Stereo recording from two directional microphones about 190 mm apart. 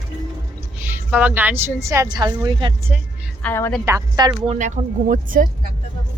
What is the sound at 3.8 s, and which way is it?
Speech, 15° right (ahead or behind).